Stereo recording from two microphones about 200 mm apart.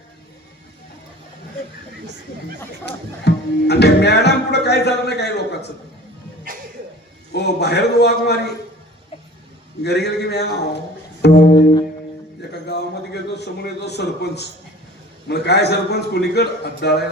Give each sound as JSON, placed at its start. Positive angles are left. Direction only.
{"t": 2.8, "sound": "speech", "side_deg": 55}
{"t": 7.3, "sound": "speech", "side_deg": 55}
{"t": 9.8, "sound": "speech", "side_deg": 55}
{"t": 11.2, "sound": "music", "side_deg": 50}
{"t": 13.3, "sound": "speech", "side_deg": 55}